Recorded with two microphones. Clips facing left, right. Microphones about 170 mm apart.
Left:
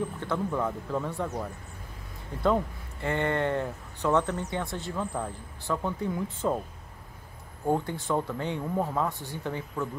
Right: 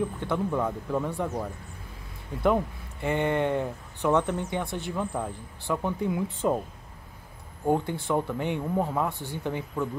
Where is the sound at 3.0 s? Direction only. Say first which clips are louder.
Right 2 dB; 15° right (ahead or behind).